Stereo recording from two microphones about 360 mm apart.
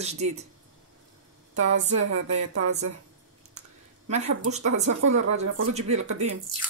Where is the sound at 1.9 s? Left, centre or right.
Right.